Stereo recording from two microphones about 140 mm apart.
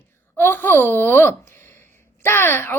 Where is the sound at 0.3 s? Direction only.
15° left (ahead or behind).